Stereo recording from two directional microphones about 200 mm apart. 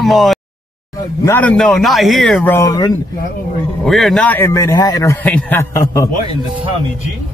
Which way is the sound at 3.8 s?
Centre (ahead or behind).